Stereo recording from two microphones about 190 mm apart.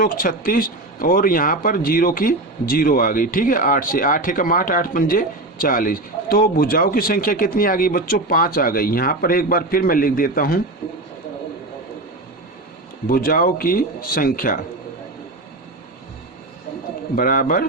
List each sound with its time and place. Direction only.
0.0 s speech: 50° left (ahead or behind)
13.1 s speech: 50° left (ahead or behind)
17.2 s speech: 45° left (ahead or behind)